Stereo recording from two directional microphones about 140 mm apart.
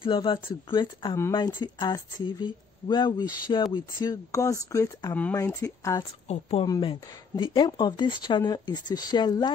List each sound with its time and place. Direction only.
0.0 s speech: 35° left (ahead or behind)
6.2 s speech: 50° left (ahead or behind)
6.6 s speech: 35° left (ahead or behind)